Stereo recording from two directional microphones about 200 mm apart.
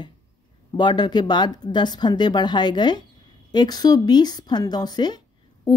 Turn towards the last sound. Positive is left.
turn(degrees=20)  # may be behind; listen again after turning